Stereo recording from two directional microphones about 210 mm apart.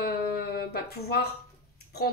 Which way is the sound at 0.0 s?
50° left (ahead or behind).